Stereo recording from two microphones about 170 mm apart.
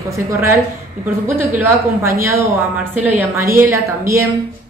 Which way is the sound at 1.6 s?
15° right (ahead or behind).